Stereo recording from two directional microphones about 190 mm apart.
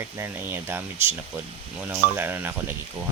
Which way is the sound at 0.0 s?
10° right (ahead or behind).